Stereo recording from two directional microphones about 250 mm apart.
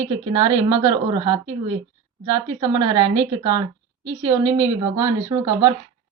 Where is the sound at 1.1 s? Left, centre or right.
Right.